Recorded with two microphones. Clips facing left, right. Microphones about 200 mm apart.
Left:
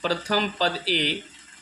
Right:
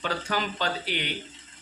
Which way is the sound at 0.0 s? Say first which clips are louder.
Left 5 dB; 35° left (ahead or behind).